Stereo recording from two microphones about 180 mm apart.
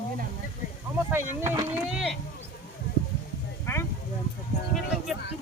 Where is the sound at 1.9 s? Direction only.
Centre (ahead or behind).